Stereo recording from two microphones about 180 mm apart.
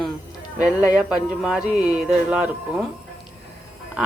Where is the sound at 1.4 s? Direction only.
5° right (ahead or behind).